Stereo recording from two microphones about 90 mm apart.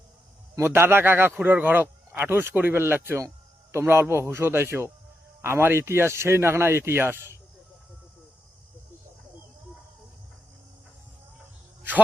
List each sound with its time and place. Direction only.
0.5 s a man's voice: 25° right (ahead or behind)